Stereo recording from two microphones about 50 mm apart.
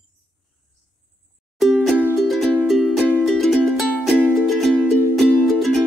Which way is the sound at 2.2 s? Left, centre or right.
Centre.